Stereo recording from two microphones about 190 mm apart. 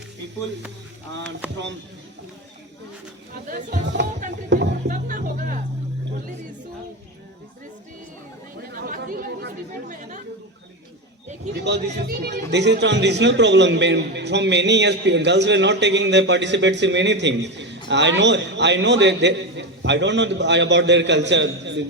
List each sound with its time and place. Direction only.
3.4 s speech: 45° right (ahead or behind)
4.4 s music: 70° right (ahead or behind)
4.9 s speech: 45° right (ahead or behind)
8.7 s chatter: 50° right (ahead or behind)
11.5 s speech: 65° right (ahead or behind)